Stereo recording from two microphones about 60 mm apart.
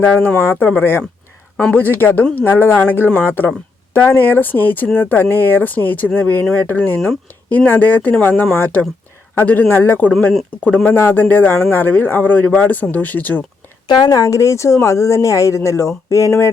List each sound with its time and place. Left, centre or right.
0.0 s a man's voice: left
14.1 s speech: left